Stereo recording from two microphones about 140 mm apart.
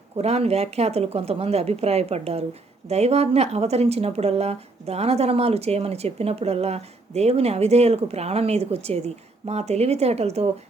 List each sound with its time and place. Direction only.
0.2 s speech: 50° right (ahead or behind)